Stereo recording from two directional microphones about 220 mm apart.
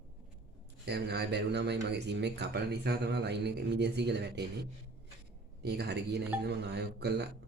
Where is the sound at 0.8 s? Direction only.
50° right (ahead or behind).